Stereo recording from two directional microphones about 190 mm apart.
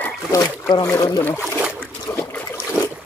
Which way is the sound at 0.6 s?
15° left (ahead or behind).